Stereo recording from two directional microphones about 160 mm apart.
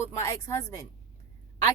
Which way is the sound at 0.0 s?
20° left (ahead or behind).